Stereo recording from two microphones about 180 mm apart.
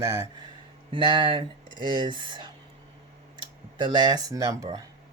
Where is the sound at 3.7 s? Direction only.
25° right (ahead or behind).